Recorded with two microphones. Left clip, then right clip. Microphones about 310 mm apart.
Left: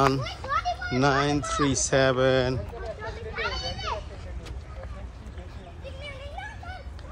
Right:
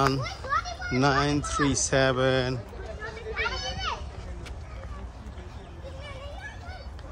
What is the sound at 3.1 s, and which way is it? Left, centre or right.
Children playing, centre.